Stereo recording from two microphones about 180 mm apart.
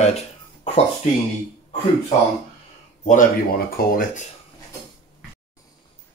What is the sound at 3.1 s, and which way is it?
Speech, 50° left (ahead or behind).